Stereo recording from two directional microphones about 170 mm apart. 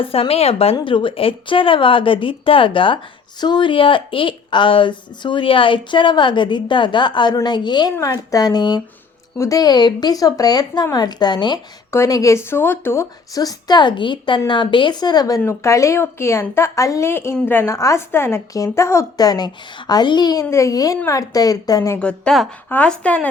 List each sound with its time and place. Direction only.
0.0 s speech: 35° left (ahead or behind)
21.9 s speech: 5° left (ahead or behind)